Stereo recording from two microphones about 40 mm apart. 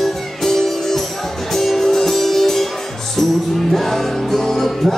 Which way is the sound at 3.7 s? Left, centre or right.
Centre.